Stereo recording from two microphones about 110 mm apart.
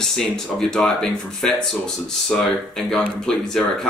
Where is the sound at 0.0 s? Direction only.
5° left (ahead or behind).